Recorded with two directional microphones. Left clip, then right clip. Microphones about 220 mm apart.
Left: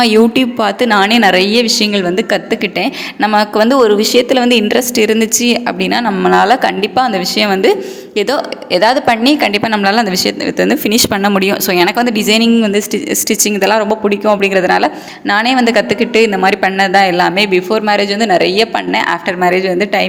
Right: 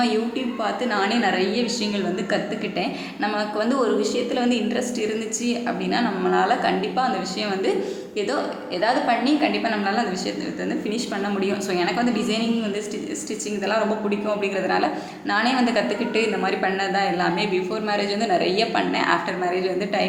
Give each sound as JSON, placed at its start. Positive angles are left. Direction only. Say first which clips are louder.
{"t": 0.0, "sound": "a woman's voice", "louder": "left 14 dB", "side_deg": 45}